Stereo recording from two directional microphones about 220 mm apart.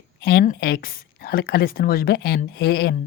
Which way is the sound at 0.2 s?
45° left (ahead or behind).